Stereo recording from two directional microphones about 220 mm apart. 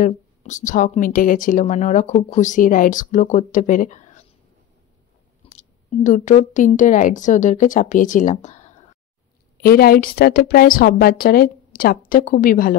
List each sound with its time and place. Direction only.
0.0 s speech: 35° left (ahead or behind)
5.5 s speech: 35° left (ahead or behind)
9.6 s a woman's voice: 45° left (ahead or behind)